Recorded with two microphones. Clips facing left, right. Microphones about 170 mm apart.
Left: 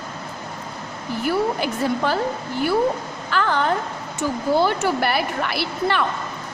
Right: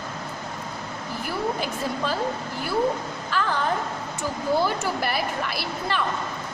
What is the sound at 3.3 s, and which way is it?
A woman's voice, 70° left (ahead or behind).